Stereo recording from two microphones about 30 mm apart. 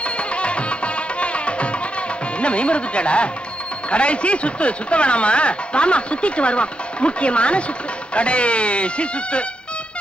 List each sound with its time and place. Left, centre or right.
0.4 s music: left
2.4 s speech: left